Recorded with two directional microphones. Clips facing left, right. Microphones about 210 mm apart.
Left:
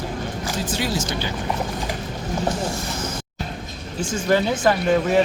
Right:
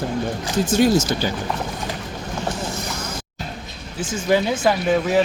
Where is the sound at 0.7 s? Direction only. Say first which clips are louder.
Right 11 dB; 45° right (ahead or behind).